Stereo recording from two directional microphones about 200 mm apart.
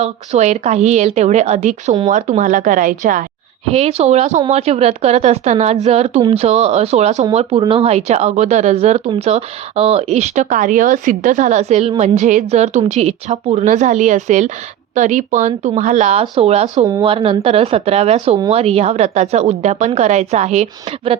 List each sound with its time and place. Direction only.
0.0 s speech: 35° right (ahead or behind)
3.7 s speech: 30° right (ahead or behind)
16.2 s speech: 20° right (ahead or behind)
16.5 s speech: 35° right (ahead or behind)